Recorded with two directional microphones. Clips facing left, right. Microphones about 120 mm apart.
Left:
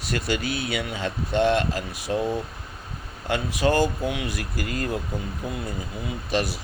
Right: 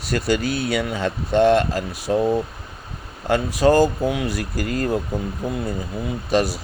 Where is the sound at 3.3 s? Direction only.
40° right (ahead or behind).